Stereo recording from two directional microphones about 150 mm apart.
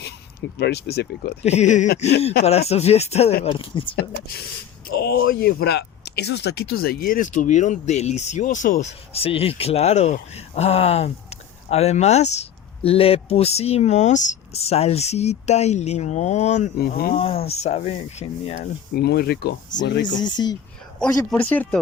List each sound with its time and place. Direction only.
0.6 s speech: 90° left
1.4 s speech: 50° left (ahead or behind)
4.9 s speech: 90° left; by 18.7 s 45° left (ahead or behind)
18.9 s speech: 90° left
20.1 s speech: 30° left (ahead or behind)
21.2 s speech: 10° left (ahead or behind)